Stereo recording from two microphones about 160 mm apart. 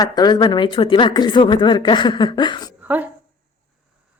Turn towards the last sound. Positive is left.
turn(degrees=-10)  # may be behind; listen again after turning